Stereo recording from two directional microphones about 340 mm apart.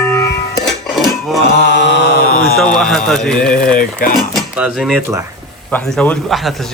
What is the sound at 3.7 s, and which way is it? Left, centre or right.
Speech, left.